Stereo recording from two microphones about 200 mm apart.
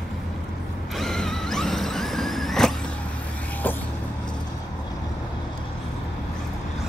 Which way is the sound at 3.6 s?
10° left (ahead or behind).